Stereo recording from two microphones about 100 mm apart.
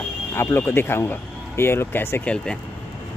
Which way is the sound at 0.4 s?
25° left (ahead or behind).